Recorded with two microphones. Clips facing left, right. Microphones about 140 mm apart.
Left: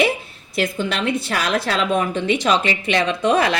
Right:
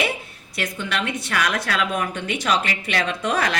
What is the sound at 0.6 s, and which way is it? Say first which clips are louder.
A woman's voice: left 5 dB; 30° left (ahead or behind).